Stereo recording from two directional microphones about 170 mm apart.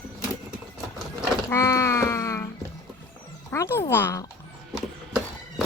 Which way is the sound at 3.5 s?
15° left (ahead or behind).